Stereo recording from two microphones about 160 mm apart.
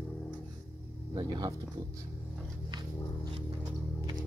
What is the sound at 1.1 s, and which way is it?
Speech, 25° right (ahead or behind).